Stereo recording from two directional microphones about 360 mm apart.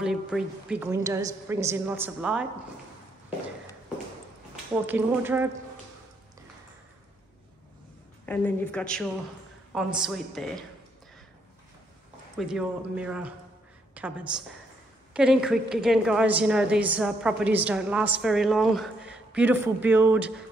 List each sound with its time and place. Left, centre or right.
0.0 s a woman's voice: centre
4.8 s a woman's voice: centre
8.3 s a woman's voice: centre
12.4 s a woman's voice: centre